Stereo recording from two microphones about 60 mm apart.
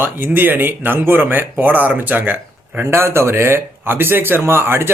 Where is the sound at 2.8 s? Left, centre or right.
Right.